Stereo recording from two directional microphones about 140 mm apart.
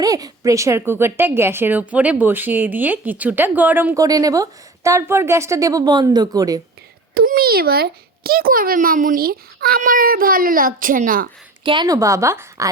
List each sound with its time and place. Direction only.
0.0 s speech: 25° right (ahead or behind); by 3.9 s 10° right (ahead or behind)
3.9 s a woman's voice: 25° right (ahead or behind)
7.1 s a child's voice: 90° right
11.6 s a woman's voice: 35° right (ahead or behind)
11.9 s a woman's voice: 25° right (ahead or behind)